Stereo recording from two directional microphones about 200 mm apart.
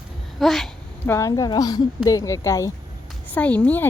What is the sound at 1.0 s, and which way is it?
A woman's voice, 15° left (ahead or behind).